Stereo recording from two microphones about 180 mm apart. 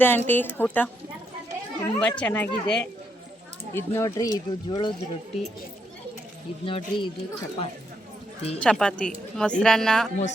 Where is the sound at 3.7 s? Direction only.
15° left (ahead or behind).